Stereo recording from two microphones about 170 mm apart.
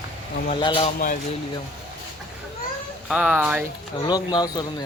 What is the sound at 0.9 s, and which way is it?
Speech, 50° left (ahead or behind).